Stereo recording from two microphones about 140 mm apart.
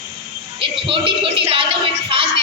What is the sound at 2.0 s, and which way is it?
Music, 40° right (ahead or behind).